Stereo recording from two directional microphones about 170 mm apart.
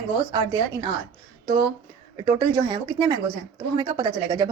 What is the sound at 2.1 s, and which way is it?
A woman's voice, 25° right (ahead or behind).